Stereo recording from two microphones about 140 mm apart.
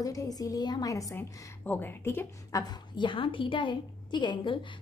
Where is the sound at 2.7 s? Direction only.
35° left (ahead or behind).